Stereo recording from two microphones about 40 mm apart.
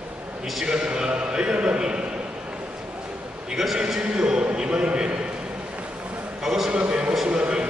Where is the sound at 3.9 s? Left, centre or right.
Centre.